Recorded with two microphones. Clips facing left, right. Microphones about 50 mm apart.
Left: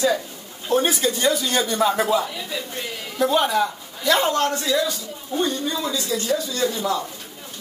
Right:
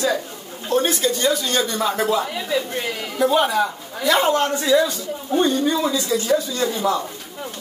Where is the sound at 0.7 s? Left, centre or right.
Centre.